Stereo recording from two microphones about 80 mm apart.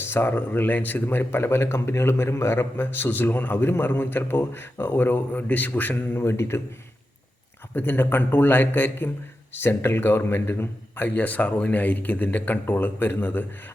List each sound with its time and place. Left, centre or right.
0.0 s speech: left
7.8 s speech: left